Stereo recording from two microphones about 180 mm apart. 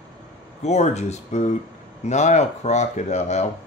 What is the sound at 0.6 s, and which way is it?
Speech, 40° left (ahead or behind).